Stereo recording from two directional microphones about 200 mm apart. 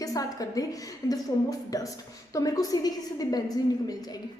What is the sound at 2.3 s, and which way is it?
A woman's voice, 15° left (ahead or behind).